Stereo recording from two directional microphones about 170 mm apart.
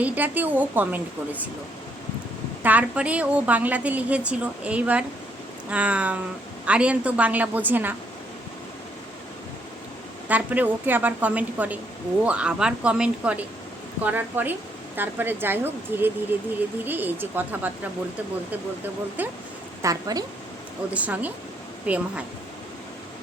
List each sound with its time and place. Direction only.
0.0 s a woman's voice: 10° right (ahead or behind)
2.6 s a woman's voice: 10° right (ahead or behind)
10.2 s a woman's voice: 10° right (ahead or behind)
19.2 s a woman's voice: 10° right (ahead or behind)
19.8 s a woman's voice: 20° right (ahead or behind)
20.9 s a woman's voice: 10° right (ahead or behind)